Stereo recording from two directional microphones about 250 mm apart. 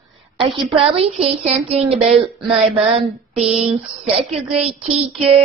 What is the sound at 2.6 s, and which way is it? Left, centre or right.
Child singing, right.